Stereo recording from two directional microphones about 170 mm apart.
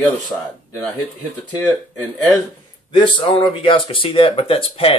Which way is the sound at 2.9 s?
30° left (ahead or behind).